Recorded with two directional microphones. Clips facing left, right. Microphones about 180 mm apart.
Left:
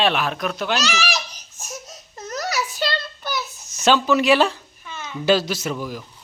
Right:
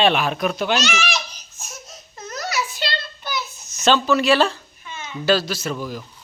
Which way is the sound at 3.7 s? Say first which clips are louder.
Even; 10° left (ahead or behind).